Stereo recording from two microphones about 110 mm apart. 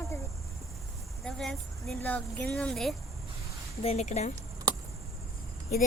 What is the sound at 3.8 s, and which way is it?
Speech, 80° left.